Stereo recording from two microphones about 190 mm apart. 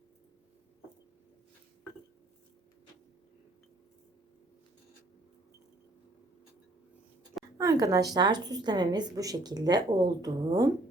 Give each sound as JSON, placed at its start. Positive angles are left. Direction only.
{"t": 7.6, "sound": "a woman's voice", "side_deg": -15}